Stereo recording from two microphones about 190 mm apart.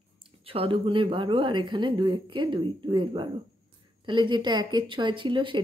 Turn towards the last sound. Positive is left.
turn(degrees=-25)  # may be behind; listen again after turning